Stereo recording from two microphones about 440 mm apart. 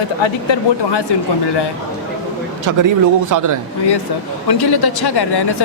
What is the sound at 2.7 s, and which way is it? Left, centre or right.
Speech, right.